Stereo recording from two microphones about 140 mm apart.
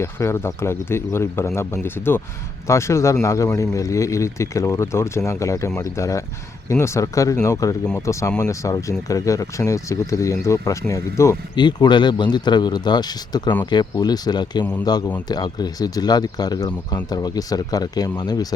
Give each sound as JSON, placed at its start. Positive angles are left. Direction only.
{"t": 0.0, "sound": "speech", "side_deg": 20}
{"t": 11.5, "sound": "speech", "side_deg": 30}
{"t": 14.6, "sound": "speech", "side_deg": 10}
{"t": 14.8, "sound": "speech", "side_deg": 30}